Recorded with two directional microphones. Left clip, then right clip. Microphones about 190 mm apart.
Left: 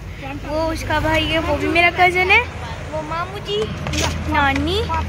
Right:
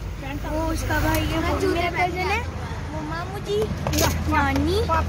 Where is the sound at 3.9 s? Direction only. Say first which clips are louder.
Right 2 dB; 40° right (ahead or behind).